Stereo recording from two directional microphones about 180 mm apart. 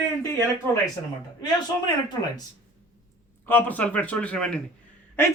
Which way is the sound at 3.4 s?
10° left (ahead or behind).